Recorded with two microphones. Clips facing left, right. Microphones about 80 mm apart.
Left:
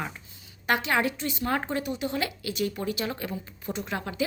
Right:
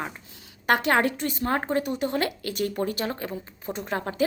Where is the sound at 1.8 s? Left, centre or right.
Right.